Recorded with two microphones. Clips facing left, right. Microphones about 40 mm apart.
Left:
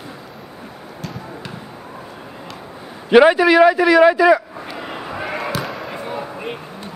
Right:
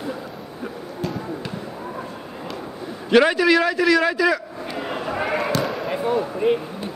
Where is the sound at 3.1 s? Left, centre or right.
Centre.